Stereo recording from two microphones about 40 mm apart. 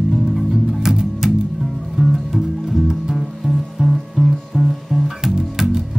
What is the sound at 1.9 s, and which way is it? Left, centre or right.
Music, centre.